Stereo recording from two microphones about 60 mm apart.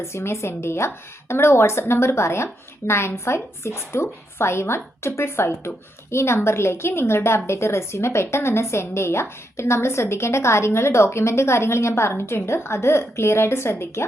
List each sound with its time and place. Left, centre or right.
0.0 s a woman's voice: left